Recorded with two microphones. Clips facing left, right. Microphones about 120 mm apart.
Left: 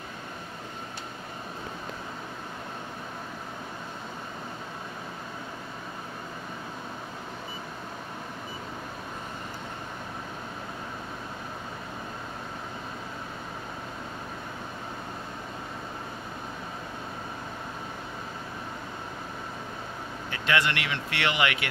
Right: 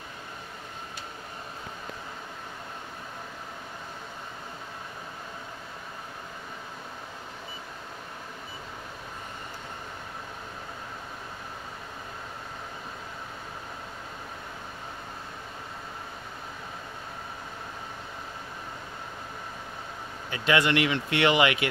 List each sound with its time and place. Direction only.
20.2 s speech: 20° right (ahead or behind)